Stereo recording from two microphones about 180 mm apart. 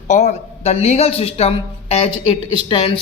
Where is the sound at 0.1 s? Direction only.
40° left (ahead or behind).